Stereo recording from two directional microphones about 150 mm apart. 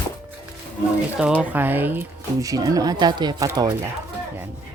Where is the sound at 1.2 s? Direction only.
10° right (ahead or behind); by 3.5 s 30° right (ahead or behind).